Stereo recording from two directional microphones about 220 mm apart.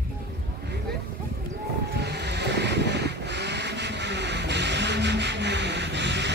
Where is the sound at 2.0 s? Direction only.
50° right (ahead or behind).